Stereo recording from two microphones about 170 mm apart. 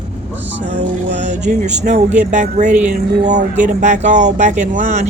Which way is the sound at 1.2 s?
45° right (ahead or behind).